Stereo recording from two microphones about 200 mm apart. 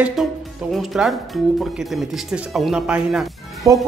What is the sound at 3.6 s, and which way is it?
Speech, 15° right (ahead or behind).